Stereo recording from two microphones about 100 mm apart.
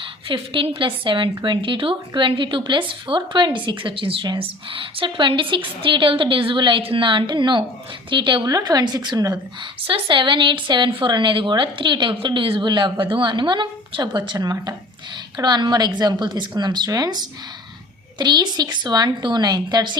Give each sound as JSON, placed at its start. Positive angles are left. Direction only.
{"t": 0.0, "sound": "a woman's voice", "side_deg": -60}
{"t": 8.4, "sound": "a woman's voice", "side_deg": -40}
{"t": 9.6, "sound": "a woman's voice", "side_deg": -55}
{"t": 14.3, "sound": "a woman's voice", "side_deg": -35}